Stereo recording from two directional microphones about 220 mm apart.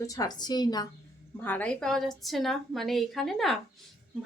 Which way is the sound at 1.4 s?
5° left (ahead or behind).